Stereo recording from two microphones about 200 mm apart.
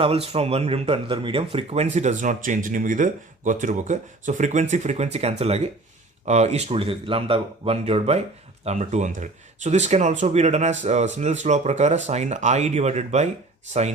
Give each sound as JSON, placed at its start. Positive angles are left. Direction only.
{"t": 0.0, "sound": "speech", "side_deg": -30}